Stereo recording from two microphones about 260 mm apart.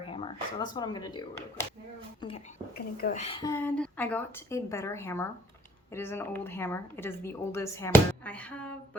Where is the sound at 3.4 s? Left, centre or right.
Centre.